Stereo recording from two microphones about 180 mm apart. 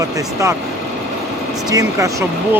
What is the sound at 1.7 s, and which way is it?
Speech, 20° right (ahead or behind).